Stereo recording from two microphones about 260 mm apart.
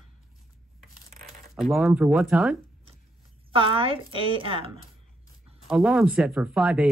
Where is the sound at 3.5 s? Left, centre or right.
Right.